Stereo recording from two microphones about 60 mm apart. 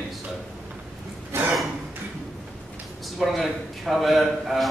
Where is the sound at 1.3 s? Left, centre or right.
Right.